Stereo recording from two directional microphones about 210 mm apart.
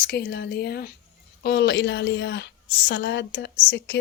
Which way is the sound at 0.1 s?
50° left (ahead or behind).